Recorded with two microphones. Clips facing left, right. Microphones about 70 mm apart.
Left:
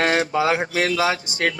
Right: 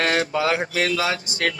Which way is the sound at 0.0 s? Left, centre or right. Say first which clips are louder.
Left 2 dB; left.